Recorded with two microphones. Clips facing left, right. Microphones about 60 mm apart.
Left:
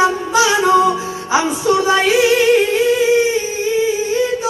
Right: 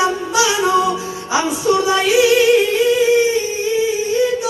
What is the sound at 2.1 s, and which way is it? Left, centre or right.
Female singing, left.